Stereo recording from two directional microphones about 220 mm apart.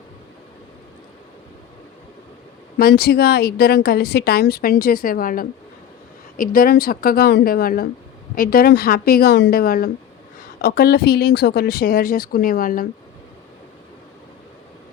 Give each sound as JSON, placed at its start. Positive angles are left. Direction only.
{"t": 2.7, "sound": "a woman's voice", "side_deg": 45}